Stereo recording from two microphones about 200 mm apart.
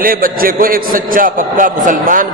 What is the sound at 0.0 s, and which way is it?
A man's voice, 45° right (ahead or behind).